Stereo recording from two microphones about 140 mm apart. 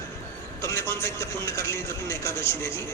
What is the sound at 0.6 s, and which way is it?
A man's voice, 20° left (ahead or behind).